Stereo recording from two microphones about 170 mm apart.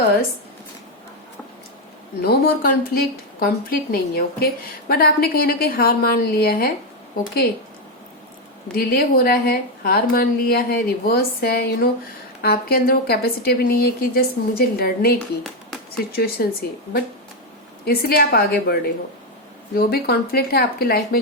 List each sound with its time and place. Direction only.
2.2 s a woman's voice: 65° left (ahead or behind)
8.7 s a woman's voice: 65° left (ahead or behind)
16.1 s a woman's voice: 60° left (ahead or behind)